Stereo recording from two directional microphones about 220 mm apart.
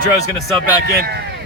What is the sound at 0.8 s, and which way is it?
Speech, 45° right (ahead or behind).